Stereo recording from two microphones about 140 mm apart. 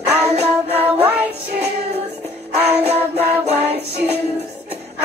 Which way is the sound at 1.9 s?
45° right (ahead or behind).